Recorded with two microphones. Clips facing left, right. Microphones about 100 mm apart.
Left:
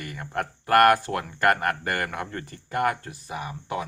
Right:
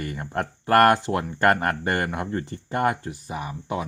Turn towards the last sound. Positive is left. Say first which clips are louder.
# right 2 dB
turn(degrees=-30)  # may be behind; listen again after turning